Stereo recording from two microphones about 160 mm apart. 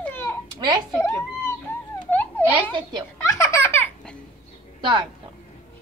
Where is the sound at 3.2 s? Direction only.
15° left (ahead or behind).